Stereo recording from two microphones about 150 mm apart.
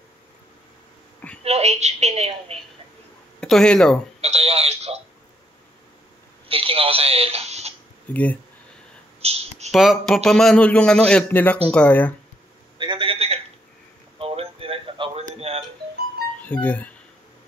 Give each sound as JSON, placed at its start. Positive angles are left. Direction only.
{"t": 1.4, "sound": "a woman's voice", "side_deg": -45}
{"t": 3.3, "sound": "speech", "side_deg": 5}
{"t": 4.2, "sound": "a woman's voice", "side_deg": -45}
{"t": 6.5, "sound": "speech", "side_deg": -40}
{"t": 8.1, "sound": "a man's voice", "side_deg": 10}
{"t": 9.2, "sound": "a sound", "side_deg": -45}
{"t": 9.7, "sound": "a man's voice", "side_deg": 0}
{"t": 12.7, "sound": "a sound", "side_deg": -35}
{"t": 15.5, "sound": "music", "side_deg": -40}
{"t": 16.4, "sound": "a man's voice", "side_deg": 10}